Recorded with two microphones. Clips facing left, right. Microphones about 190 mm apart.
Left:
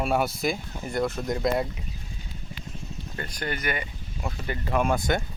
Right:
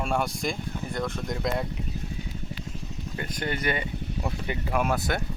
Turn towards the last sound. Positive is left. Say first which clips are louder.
# left 2 dB
turn(degrees=-5)  # may be behind; listen again after turning